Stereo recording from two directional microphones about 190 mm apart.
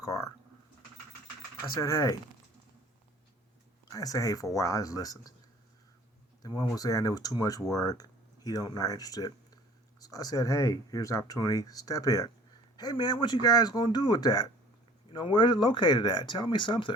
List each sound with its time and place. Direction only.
0.0 s a sound: 15° left (ahead or behind)
1.8 s speech: 15° left (ahead or behind)
3.8 s speech: 20° left (ahead or behind)
6.7 s speech: 20° left (ahead or behind)